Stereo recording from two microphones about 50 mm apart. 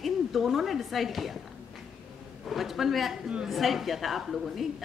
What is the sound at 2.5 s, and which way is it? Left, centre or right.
A man's voice, centre.